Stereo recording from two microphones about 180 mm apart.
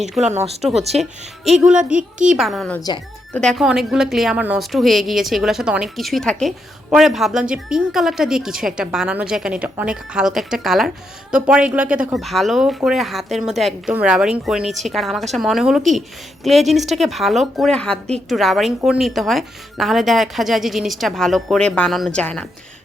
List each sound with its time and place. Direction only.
0.2 s speech: 40° right (ahead or behind)
1.5 s a woman's voice: 5° right (ahead or behind)
1.9 s a woman's voice: 45° right (ahead or behind)
2.2 s a woman's voice: centre (ahead or behind)